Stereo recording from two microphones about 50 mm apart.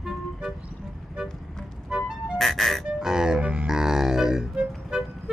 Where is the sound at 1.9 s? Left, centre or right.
Centre.